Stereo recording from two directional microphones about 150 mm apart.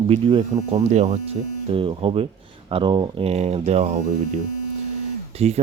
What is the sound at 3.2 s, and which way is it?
Speech, 45° right (ahead or behind).